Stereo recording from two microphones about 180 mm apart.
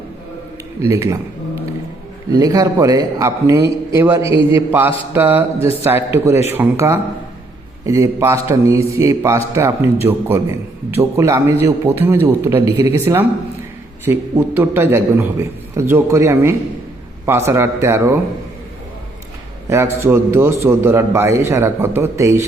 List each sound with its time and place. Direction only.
0.9 s a man's voice: 15° right (ahead or behind)
2.3 s a man's voice: 20° right (ahead or behind)
19.7 s a man's voice: 15° right (ahead or behind)